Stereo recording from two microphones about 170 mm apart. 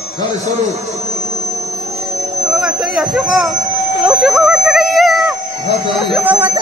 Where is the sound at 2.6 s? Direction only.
Centre (ahead or behind).